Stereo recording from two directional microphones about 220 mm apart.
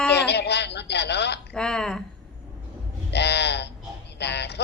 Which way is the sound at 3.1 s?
50° left (ahead or behind).